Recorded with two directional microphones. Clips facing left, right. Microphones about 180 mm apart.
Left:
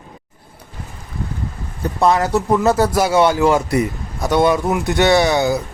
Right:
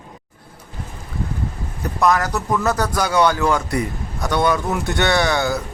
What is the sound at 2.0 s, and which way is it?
A man's voice, 25° left (ahead or behind).